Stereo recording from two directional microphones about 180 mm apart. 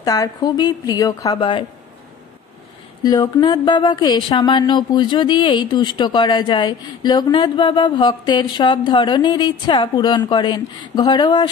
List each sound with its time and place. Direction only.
0.0 s a woman's voice: 20° left (ahead or behind)
3.0 s a woman's voice: 20° left (ahead or behind)